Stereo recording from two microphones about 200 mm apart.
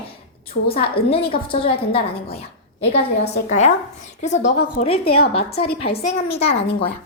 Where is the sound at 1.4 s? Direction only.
25° left (ahead or behind).